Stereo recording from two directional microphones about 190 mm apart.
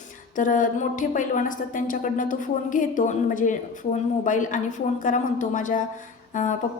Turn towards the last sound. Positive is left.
turn(degrees=40)  # may be behind; listen again after turning